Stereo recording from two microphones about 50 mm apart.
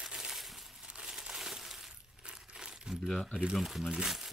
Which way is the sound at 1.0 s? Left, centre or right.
Centre.